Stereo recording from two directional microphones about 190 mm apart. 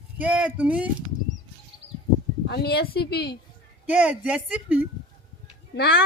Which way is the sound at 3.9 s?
5° right (ahead or behind).